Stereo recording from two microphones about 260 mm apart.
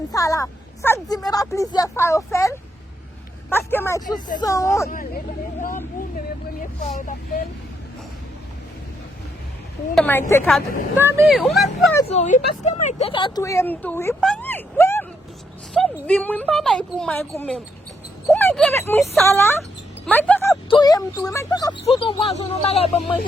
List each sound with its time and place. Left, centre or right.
0.1 s speech: centre
4.9 s speech: left
9.9 s speech: centre
10.9 s a woman's voice: centre
12.0 s a woman's voice: left